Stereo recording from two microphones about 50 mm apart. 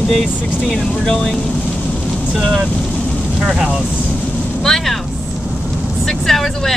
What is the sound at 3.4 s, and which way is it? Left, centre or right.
Speech, centre.